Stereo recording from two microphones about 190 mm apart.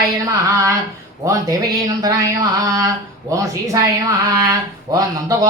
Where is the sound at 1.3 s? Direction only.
20° right (ahead or behind).